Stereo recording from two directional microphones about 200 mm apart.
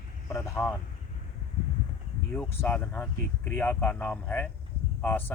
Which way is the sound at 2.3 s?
10° left (ahead or behind).